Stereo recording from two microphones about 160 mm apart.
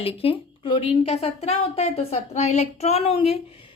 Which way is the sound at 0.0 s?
35° left (ahead or behind).